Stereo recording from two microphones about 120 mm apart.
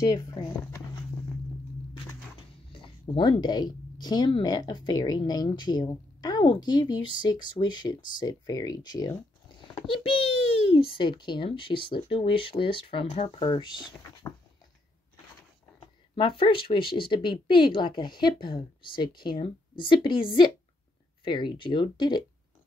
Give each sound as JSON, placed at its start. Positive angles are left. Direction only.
{"t": 0.0, "sound": "speech", "side_deg": 30}
{"t": 2.7, "sound": "speech", "side_deg": 45}
{"t": 10.7, "sound": "speech", "side_deg": 45}
{"t": 16.2, "sound": "speech", "side_deg": 45}